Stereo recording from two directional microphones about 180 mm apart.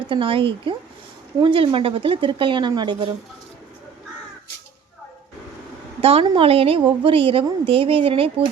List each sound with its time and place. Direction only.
0.1 s speech: 30° right (ahead or behind)
6.0 s a woman's voice: 30° right (ahead or behind)